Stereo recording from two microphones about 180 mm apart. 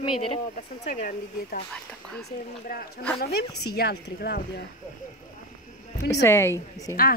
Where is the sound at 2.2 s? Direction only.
55° left (ahead or behind).